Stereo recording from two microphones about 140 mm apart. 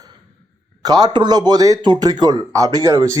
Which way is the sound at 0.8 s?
30° right (ahead or behind).